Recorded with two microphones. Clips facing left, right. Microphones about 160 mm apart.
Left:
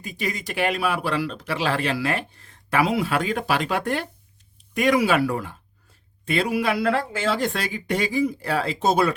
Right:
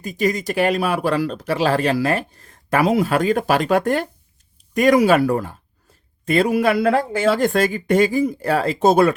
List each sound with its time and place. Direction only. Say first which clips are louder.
0.0 s speech: right 9 dB; 45° right (ahead or behind)